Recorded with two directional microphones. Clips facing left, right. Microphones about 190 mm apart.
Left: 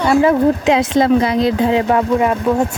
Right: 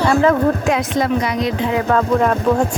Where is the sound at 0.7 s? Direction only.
25° left (ahead or behind).